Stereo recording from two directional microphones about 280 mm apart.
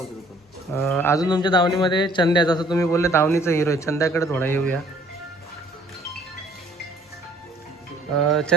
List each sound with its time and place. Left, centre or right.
0.7 s a man's voice: centre
8.2 s mantra: centre